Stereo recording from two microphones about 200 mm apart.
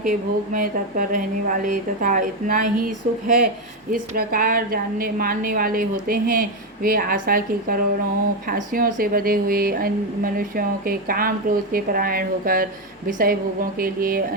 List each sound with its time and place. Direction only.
0.0 s a woman's voice: 45° right (ahead or behind)